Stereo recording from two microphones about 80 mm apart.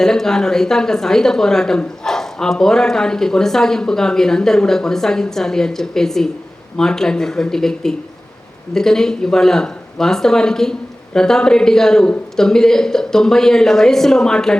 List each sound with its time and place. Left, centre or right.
0.0 s speech: centre